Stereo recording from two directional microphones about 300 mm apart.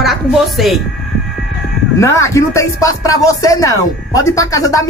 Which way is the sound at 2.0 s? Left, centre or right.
Centre.